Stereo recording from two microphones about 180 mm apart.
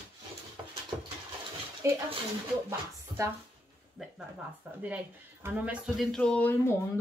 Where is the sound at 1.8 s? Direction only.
15° right (ahead or behind).